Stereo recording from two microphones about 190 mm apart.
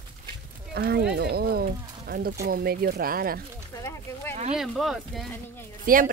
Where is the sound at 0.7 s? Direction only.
55° right (ahead or behind).